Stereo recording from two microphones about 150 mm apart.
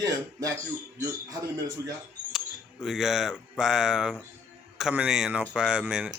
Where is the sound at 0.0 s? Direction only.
20° right (ahead or behind).